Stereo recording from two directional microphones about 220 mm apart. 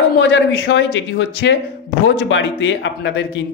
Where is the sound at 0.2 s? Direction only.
55° left (ahead or behind).